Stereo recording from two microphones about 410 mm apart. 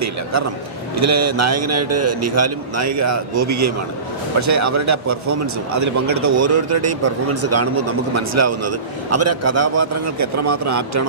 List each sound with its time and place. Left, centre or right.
0.9 s a man's voice: right